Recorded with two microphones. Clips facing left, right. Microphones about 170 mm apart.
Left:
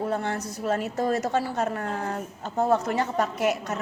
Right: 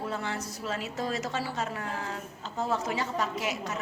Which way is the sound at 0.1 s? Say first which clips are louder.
Left 6 dB; 55° left (ahead or behind).